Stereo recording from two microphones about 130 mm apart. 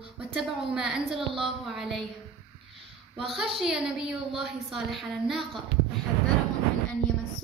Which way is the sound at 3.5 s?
5° right (ahead or behind).